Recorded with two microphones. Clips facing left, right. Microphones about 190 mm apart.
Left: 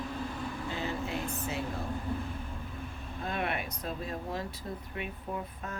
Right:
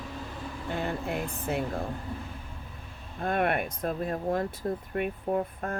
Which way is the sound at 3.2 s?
50° right (ahead or behind).